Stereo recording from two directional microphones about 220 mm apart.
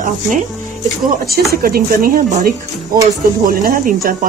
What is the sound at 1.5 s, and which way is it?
Speech, 40° right (ahead or behind).